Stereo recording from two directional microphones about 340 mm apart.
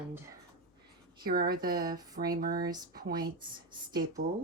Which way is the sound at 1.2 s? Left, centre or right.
Right.